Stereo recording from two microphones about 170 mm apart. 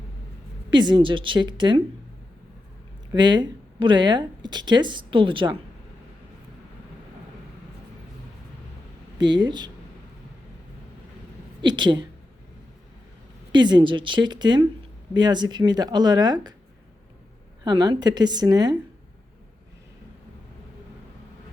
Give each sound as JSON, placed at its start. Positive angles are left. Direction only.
{"t": 0.7, "sound": "speech", "side_deg": -25}
{"t": 3.1, "sound": "speech", "side_deg": -25}
{"t": 9.1, "sound": "speech", "side_deg": -25}
{"t": 11.6, "sound": "speech", "side_deg": -25}
{"t": 13.5, "sound": "speech", "side_deg": -25}
{"t": 17.6, "sound": "speech", "side_deg": -25}